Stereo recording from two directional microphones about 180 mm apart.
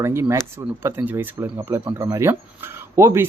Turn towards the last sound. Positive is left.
turn(degrees=-15)  # may be behind; listen again after turning